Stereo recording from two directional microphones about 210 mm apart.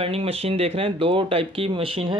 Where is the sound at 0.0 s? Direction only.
25° right (ahead or behind).